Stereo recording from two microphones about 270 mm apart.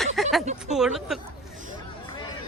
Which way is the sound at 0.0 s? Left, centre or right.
Centre.